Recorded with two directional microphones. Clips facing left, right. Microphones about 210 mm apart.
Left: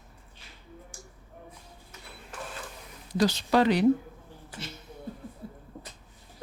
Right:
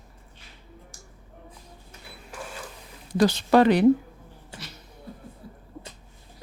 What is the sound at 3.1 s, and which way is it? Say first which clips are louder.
Speech: right 5 dB; 55° right (ahead or behind).